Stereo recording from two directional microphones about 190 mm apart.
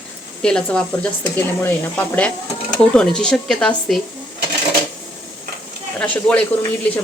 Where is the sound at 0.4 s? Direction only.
5° left (ahead or behind).